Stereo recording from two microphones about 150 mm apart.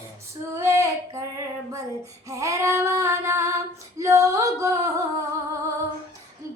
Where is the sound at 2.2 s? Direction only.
20° right (ahead or behind).